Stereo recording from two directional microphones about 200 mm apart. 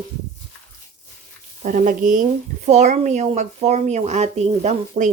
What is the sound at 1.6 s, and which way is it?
Speech, 40° right (ahead or behind).